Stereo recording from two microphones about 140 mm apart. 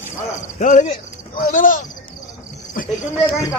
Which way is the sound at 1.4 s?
75° left (ahead or behind).